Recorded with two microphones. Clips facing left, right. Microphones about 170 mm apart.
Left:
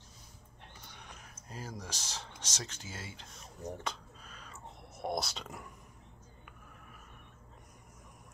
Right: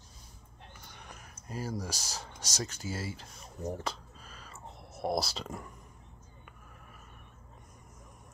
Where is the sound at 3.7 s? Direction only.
Centre (ahead or behind).